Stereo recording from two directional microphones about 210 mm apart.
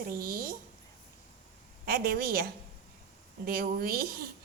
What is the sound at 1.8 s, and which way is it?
A woman's voice, 45° right (ahead or behind).